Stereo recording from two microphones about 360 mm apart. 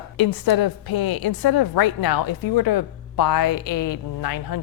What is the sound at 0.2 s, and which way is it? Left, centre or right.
A woman's voice, left.